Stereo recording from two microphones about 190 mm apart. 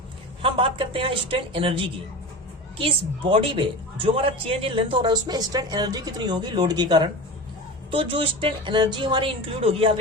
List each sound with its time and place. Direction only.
0.4 s speech: 30° right (ahead or behind)